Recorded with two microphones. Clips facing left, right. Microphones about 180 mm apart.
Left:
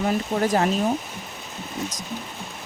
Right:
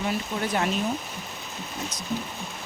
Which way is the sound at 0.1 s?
45° left (ahead or behind).